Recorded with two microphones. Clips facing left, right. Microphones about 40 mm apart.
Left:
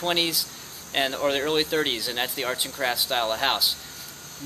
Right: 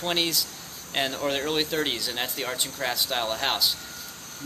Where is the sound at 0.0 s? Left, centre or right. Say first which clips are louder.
Left 2 dB; centre.